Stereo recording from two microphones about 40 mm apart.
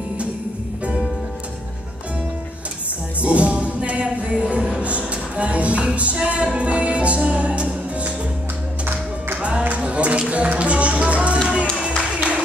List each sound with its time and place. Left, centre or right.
3.2 s music: right
9.4 s music: right
12.0 s music: right